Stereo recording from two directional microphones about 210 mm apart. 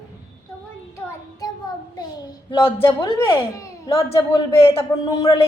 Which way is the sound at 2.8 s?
10° left (ahead or behind).